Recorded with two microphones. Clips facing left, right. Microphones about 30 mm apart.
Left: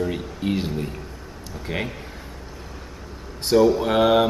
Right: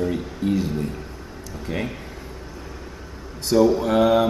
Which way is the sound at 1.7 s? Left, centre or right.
Left.